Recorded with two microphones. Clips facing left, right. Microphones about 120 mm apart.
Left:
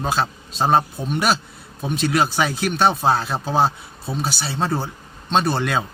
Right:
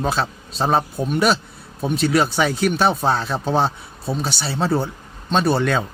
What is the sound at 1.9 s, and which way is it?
Speech, centre (ahead or behind).